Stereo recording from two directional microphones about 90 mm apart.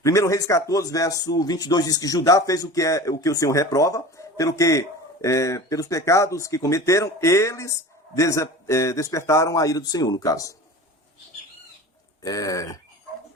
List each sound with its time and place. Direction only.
0.0 s speech: 35° left (ahead or behind)
12.2 s speech: 40° left (ahead or behind)